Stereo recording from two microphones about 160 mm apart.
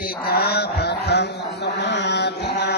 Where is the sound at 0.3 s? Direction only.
80° left.